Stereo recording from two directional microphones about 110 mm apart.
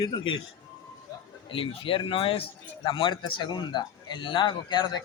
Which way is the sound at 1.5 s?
50° left (ahead or behind).